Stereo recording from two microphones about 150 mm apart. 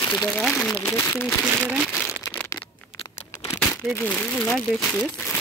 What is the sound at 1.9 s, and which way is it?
Crumpling, 5° left (ahead or behind).